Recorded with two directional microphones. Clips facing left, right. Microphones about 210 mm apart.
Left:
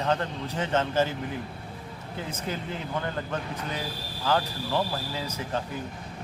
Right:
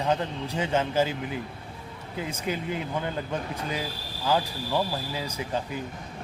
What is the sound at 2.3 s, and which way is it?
Speech, 10° right (ahead or behind).